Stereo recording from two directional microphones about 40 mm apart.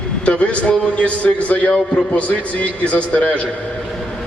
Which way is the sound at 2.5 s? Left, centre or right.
Left.